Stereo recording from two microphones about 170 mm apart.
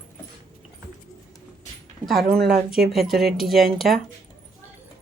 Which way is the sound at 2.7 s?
Centre (ahead or behind).